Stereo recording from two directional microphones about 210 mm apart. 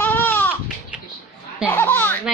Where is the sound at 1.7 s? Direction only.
10° left (ahead or behind).